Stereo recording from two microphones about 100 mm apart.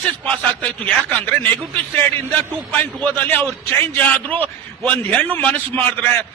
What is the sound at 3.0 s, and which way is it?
A man's voice, 10° left (ahead or behind).